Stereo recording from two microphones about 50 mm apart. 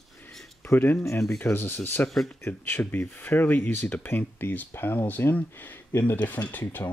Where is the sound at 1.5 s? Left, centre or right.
Left.